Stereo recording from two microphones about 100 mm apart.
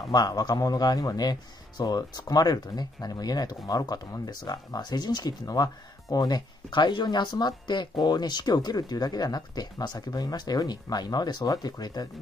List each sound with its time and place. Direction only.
0.1 s speech: 45° left (ahead or behind)